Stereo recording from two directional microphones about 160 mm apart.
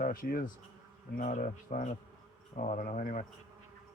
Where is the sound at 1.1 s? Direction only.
50° left (ahead or behind).